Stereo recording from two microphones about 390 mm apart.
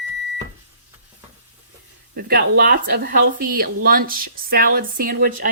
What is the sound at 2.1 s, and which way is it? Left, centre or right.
Speech, right.